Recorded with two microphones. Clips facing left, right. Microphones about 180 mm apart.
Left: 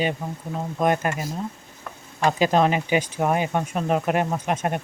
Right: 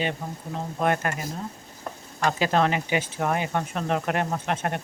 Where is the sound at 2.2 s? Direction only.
15° left (ahead or behind).